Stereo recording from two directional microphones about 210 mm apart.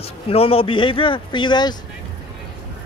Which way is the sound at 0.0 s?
30° left (ahead or behind).